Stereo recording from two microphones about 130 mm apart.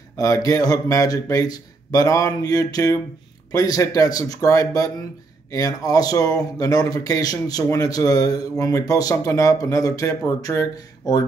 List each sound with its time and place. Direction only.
0.2 s speech: 25° left (ahead or behind)